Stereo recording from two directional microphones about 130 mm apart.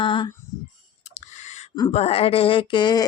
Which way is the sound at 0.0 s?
40° left (ahead or behind).